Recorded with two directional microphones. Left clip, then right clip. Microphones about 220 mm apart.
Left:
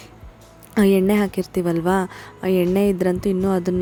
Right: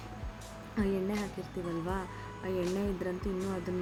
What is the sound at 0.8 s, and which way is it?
Speech, 50° left (ahead or behind).